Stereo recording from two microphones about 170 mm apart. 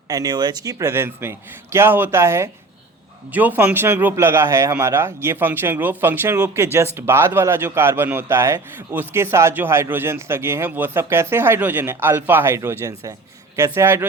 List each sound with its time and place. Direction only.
0.1 s a man's voice: 20° right (ahead or behind)